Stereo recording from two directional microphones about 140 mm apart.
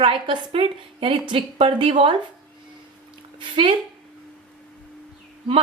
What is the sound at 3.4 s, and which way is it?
Speech, 35° right (ahead or behind).